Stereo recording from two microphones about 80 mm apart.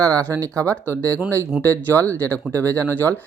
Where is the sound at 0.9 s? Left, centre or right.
Right.